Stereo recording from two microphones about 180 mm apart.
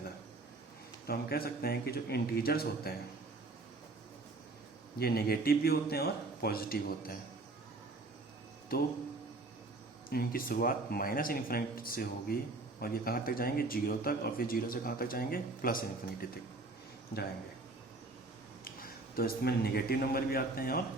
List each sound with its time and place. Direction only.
1.0 s a man's voice: 55° left (ahead or behind)
4.9 s a man's voice: 60° left (ahead or behind)
8.7 s a man's voice: 55° left (ahead or behind)
10.1 s a man's voice: 55° left (ahead or behind)
18.6 s a man's voice: 55° left (ahead or behind)